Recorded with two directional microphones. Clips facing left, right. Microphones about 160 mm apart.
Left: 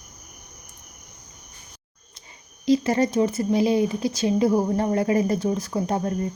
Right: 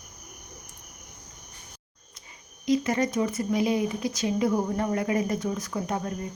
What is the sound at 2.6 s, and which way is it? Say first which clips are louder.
Speech: left 4 dB; 30° left (ahead or behind).